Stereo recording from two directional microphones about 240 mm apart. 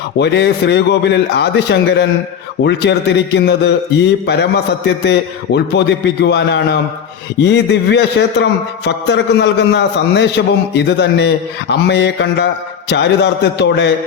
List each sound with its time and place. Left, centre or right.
0.2 s a man's voice: left